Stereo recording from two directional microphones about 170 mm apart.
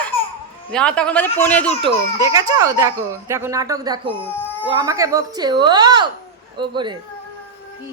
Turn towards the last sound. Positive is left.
turn(degrees=-25)  # may be behind; listen again after turning